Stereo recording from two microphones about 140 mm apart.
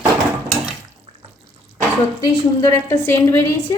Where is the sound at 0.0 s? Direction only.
Centre (ahead or behind).